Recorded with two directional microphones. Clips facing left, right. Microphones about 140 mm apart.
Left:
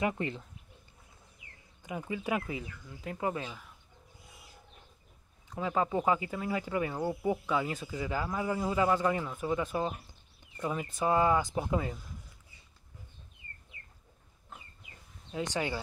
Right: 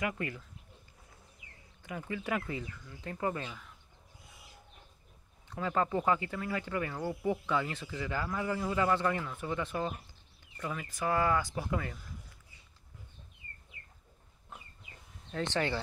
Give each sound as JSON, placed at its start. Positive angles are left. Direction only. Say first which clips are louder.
{"t": 0.0, "sound": "speech", "louder": "left 4 dB", "side_deg": 25}
{"t": 1.8, "sound": "speech", "louder": "left 2 dB", "side_deg": 15}
{"t": 5.5, "sound": "speech", "louder": "left 1 dB", "side_deg": 10}
{"t": 15.3, "sound": "speech", "louder": "right 1 dB", "side_deg": 10}